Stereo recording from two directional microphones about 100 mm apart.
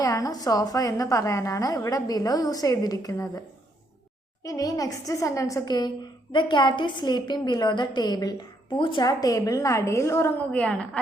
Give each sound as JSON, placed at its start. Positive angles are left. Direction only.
{"t": 0.0, "sound": "a woman's voice", "side_deg": 35}
{"t": 4.4, "sound": "a woman's voice", "side_deg": 35}
{"t": 6.3, "sound": "a woman's voice", "side_deg": 50}
{"t": 8.8, "sound": "a woman's voice", "side_deg": 55}
{"t": 9.0, "sound": "a woman's voice", "side_deg": 35}
{"t": 10.5, "sound": "a woman's voice", "side_deg": 10}